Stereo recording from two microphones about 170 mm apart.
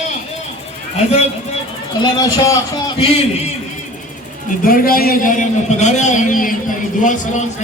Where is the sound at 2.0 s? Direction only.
25° left (ahead or behind).